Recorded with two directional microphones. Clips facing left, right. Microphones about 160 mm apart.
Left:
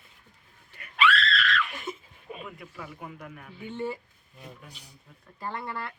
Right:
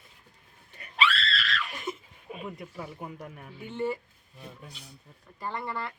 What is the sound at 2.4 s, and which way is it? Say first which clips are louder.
A man's voice: right 6 dB; 35° right (ahead or behind).